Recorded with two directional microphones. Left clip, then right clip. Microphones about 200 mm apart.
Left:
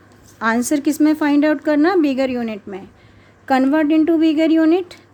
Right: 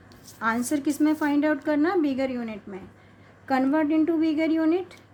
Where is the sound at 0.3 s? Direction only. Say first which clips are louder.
Left 8 dB; 40° left (ahead or behind).